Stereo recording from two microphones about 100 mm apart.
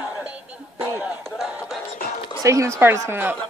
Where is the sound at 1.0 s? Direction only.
5° right (ahead or behind).